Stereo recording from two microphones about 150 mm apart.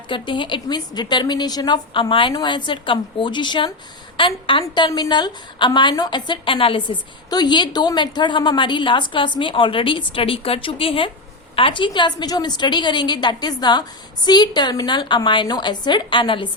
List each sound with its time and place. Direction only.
0.1 s a woman's voice: 35° left (ahead or behind)